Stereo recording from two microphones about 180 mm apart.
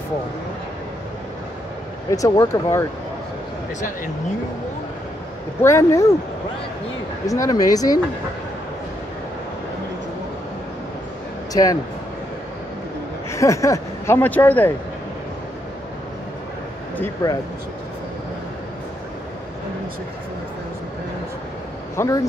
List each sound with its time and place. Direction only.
2.0 s speech: 15° left (ahead or behind)
5.6 s speech: 15° left (ahead or behind)
7.2 s speech: 20° left (ahead or behind)
11.5 s speech: 20° left (ahead or behind)
13.3 s speech: 15° left (ahead or behind)
17.0 s speech: 20° left (ahead or behind)
21.9 s speech: 15° left (ahead or behind)